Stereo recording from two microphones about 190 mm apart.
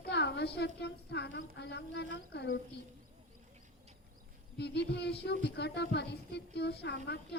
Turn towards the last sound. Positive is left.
turn(degrees=60)  # may be behind; listen again after turning